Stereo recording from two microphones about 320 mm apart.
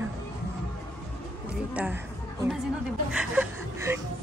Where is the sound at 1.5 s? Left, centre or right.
Centre.